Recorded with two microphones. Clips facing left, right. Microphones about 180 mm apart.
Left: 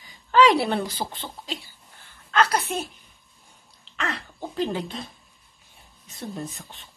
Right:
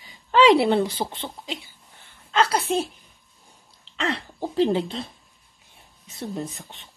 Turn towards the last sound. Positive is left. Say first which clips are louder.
# right 3 dB
turn(degrees=-20)  # may be behind; listen again after turning